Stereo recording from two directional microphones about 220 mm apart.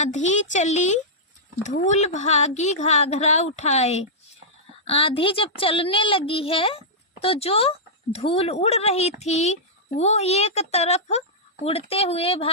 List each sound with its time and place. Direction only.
0.0 s a woman's voice: 30° left (ahead or behind)